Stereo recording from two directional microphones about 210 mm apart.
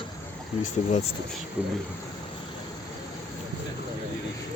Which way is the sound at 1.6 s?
5° right (ahead or behind).